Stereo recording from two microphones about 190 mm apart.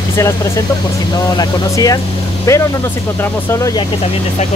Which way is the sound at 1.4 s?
20° left (ahead or behind).